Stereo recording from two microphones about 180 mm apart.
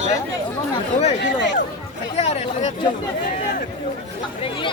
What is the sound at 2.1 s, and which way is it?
Speech, 35° left (ahead or behind).